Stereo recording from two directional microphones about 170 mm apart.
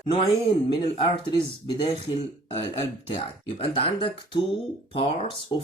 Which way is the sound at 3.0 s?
35° left (ahead or behind).